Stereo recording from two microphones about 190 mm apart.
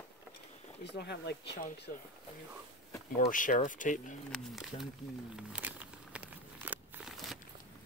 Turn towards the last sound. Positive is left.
turn(degrees=-5)  # may be behind; listen again after turning